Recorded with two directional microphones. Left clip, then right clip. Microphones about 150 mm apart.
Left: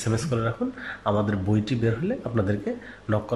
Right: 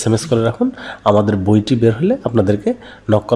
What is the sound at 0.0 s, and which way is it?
A man's voice, 40° right (ahead or behind).